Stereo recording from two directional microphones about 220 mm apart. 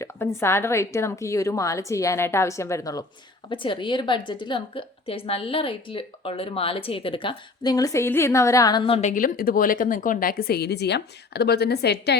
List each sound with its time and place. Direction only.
0.0 s a woman's voice: 10° left (ahead or behind); by 12.1 s 50° left (ahead or behind)